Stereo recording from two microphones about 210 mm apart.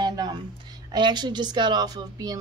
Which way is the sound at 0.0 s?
20° right (ahead or behind).